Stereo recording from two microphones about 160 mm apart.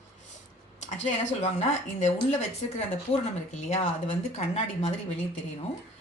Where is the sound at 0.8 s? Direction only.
45° left (ahead or behind).